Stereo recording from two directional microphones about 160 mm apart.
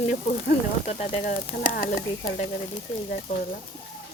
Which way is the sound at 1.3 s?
60° left (ahead or behind).